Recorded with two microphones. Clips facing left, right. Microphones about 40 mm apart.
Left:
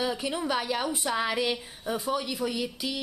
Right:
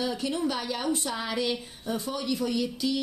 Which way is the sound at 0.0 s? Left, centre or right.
Centre.